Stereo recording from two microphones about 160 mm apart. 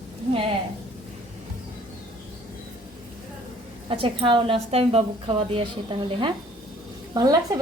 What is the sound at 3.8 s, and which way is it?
A woman's voice, 35° right (ahead or behind).